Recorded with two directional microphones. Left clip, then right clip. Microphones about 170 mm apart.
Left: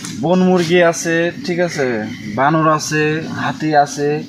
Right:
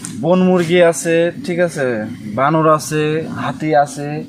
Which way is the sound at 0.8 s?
30° right (ahead or behind).